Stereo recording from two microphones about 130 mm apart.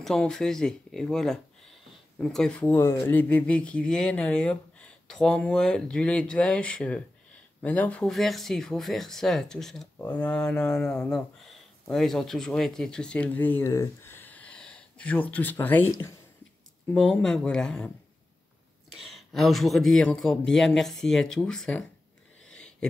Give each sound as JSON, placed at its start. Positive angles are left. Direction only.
{"t": 0.0, "sound": "speech", "side_deg": 5}
{"t": 2.7, "sound": "speech", "side_deg": 20}
{"t": 16.9, "sound": "speech", "side_deg": 5}
{"t": 18.9, "sound": "speech", "side_deg": 0}